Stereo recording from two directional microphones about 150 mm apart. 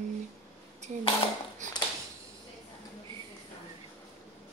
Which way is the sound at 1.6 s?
55° right (ahead or behind).